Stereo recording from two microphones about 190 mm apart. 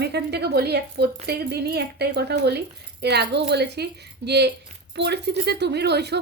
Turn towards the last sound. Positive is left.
turn(degrees=-60)  # may be behind; listen again after turning